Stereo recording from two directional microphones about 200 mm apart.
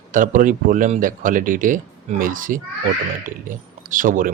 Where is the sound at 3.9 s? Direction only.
40° right (ahead or behind).